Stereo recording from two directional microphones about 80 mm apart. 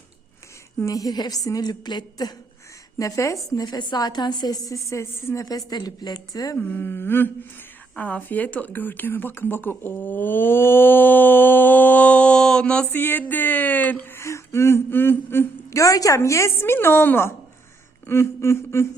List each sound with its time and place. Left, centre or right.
0.9 s a woman's voice: left
3.0 s a woman's voice: left
3.7 s a woman's voice: left
5.5 s a woman's voice: left
6.6 s speech: left
7.9 s speech: centre
12.9 s speech: left
15.7 s a woman's voice: left
18.0 s a sound: left